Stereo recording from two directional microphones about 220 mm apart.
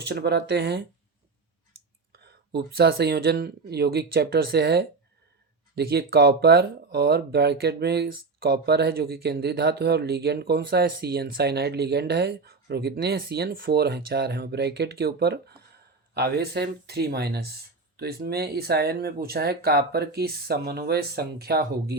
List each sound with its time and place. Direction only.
0.0 s speech: 45° right (ahead or behind)
2.1 s speech: 45° right (ahead or behind)